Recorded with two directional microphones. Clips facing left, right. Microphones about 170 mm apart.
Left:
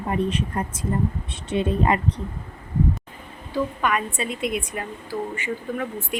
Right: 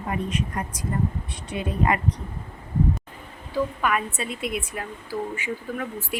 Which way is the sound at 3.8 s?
5° right (ahead or behind).